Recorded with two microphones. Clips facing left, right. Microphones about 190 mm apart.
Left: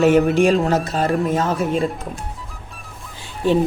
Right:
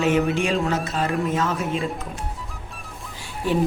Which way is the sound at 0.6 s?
35° left (ahead or behind).